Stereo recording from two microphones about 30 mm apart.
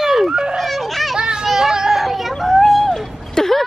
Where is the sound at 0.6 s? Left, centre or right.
Centre.